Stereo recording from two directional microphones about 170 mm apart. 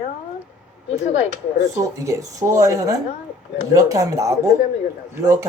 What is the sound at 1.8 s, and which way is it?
Speech, 20° right (ahead or behind).